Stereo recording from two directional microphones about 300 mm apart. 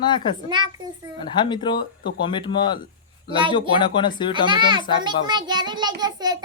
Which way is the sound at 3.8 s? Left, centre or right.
Centre.